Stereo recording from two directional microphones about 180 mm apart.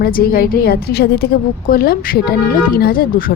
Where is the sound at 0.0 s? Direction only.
55° left (ahead or behind).